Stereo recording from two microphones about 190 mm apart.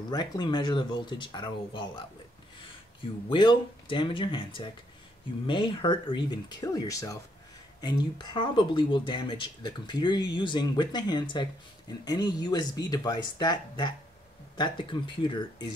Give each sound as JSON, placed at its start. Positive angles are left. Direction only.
{"t": 0.1, "sound": "speech", "side_deg": 20}